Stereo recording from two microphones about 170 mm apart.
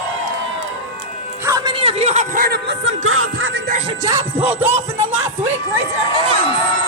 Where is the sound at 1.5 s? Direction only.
20° right (ahead or behind).